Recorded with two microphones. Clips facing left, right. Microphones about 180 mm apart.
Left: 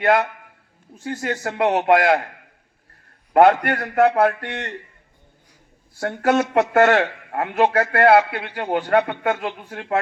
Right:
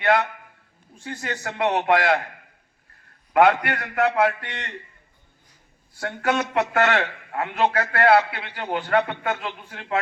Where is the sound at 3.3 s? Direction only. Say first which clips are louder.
Left 4 dB; 45° left (ahead or behind).